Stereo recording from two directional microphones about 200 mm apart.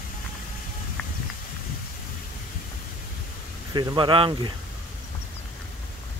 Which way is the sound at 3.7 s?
20° right (ahead or behind).